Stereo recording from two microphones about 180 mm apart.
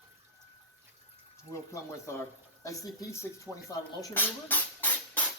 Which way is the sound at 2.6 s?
20° left (ahead or behind).